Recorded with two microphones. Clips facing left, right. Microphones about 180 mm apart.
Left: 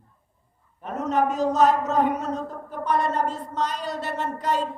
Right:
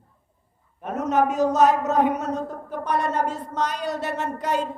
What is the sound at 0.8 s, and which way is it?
Speech, 65° right (ahead or behind).